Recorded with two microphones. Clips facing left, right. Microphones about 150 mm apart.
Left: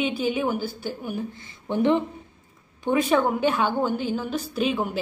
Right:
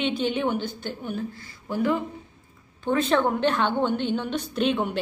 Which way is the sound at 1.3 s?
20° left (ahead or behind).